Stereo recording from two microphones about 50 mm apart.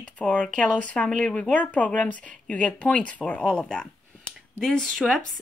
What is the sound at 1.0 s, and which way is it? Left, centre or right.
Speech, centre.